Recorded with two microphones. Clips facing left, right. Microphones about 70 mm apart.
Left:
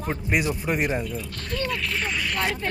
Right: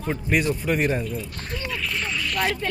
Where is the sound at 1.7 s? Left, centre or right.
Centre.